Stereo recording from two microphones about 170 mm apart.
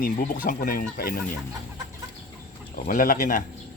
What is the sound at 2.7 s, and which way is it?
Speech, 55° left (ahead or behind).